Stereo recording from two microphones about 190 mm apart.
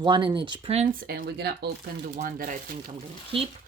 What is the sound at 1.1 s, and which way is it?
Speech, 55° right (ahead or behind).